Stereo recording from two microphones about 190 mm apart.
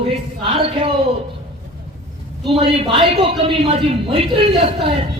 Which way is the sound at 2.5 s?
30° right (ahead or behind).